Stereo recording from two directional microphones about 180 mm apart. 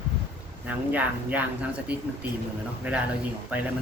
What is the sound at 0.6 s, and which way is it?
Speech, 10° right (ahead or behind).